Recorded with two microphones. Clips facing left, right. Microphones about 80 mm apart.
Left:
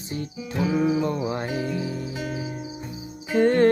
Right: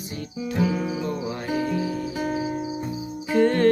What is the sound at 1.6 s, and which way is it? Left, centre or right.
Music, right.